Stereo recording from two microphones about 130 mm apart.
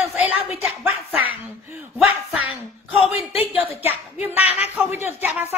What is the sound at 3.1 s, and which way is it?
Speech, 50° left (ahead or behind).